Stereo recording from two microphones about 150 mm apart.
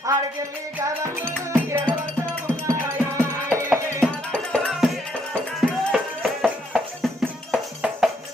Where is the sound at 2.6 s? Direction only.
20° right (ahead or behind).